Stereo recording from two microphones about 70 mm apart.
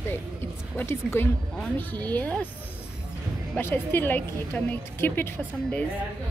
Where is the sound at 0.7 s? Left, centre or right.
Left.